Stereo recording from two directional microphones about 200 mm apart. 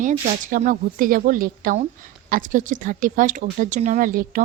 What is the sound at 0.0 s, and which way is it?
A woman's voice, 40° right (ahead or behind).